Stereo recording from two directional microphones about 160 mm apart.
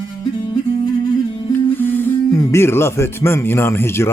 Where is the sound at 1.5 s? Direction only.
15° left (ahead or behind).